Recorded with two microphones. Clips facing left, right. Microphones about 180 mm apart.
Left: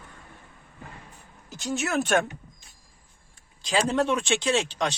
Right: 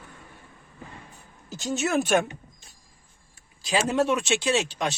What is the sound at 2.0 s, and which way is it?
Speech, 5° right (ahead or behind).